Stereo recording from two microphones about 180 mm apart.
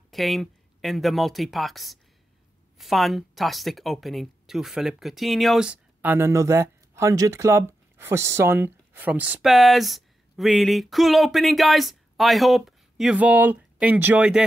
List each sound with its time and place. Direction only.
0.1 s speech: centre (ahead or behind)